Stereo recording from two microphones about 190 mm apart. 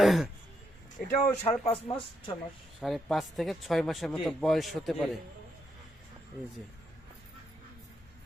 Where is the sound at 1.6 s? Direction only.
30° left (ahead or behind).